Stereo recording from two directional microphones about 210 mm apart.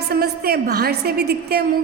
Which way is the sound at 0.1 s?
45° right (ahead or behind).